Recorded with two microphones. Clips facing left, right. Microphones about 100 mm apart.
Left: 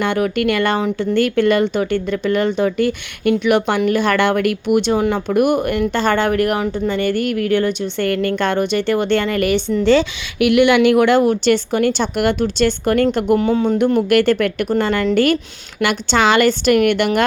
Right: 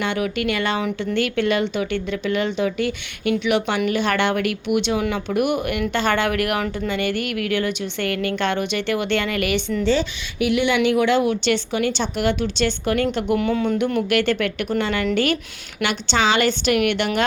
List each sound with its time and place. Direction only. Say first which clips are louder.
0.0 s a woman's voice: left 5 dB; 50° left (ahead or behind)
9.8 s a woman's voice: left 8 dB; 80° left; by 13.4 s 45° left (ahead or behind)
13.4 s a woman's voice: left 5 dB; 30° left (ahead or behind); by 17.2 s 45° left (ahead or behind)